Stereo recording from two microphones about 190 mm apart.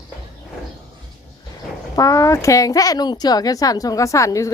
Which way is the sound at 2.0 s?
15° left (ahead or behind).